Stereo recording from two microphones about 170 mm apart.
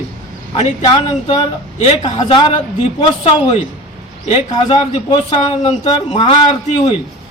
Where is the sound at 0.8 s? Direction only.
25° left (ahead or behind).